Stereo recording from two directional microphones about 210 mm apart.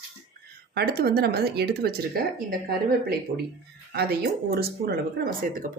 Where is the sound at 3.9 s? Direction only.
50° right (ahead or behind).